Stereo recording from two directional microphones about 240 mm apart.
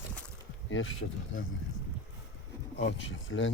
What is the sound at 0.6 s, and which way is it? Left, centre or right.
Speech, left.